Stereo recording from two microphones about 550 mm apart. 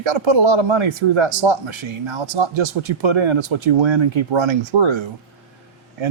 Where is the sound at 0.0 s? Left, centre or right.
Right.